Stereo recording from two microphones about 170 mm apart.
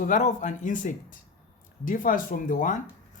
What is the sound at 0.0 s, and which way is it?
Speech, 45° left (ahead or behind).